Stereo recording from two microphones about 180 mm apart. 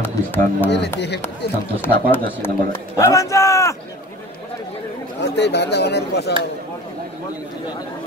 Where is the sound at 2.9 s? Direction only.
15° left (ahead or behind).